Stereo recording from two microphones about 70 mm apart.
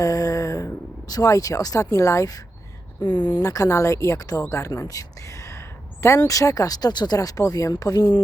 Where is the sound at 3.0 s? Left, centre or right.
Left.